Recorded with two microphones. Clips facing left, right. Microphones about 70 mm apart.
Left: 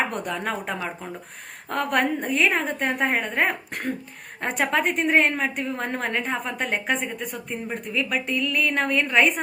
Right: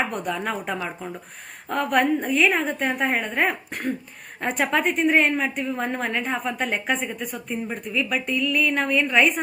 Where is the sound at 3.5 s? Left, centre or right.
Left.